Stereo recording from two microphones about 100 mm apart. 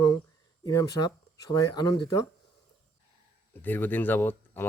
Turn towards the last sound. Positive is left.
turn(degrees=20)  # may be behind; listen again after turning